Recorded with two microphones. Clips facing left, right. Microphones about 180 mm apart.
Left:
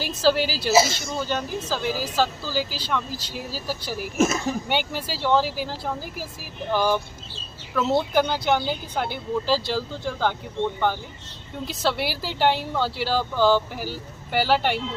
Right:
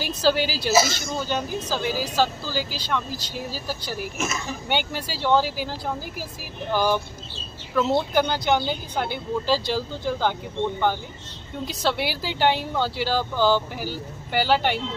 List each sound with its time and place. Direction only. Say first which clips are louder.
0.0 s speech: left 1 dB; centre (ahead or behind)
0.7 s a man's voice: left 2 dB; 30° left (ahead or behind)
1.3 s speech: right 1 dB; centre (ahead or behind)